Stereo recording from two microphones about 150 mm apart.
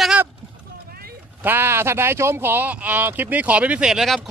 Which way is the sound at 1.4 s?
15° right (ahead or behind).